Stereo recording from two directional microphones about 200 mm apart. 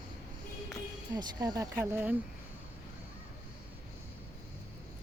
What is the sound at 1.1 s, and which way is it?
Speech, 20° right (ahead or behind).